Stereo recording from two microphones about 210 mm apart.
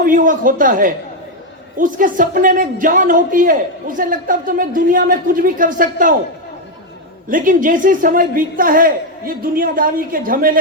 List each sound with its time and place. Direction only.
0.0 s speech: 40° right (ahead or behind)
7.3 s speech: 40° right (ahead or behind)